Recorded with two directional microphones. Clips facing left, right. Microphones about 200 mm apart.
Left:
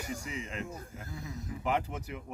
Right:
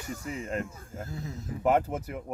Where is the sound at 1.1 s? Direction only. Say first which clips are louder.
Right 2 dB; 15° left (ahead or behind).